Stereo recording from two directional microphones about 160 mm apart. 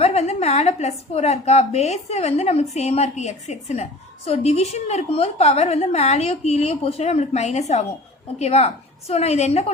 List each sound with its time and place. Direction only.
0.0 s a woman's voice: 40° left (ahead or behind)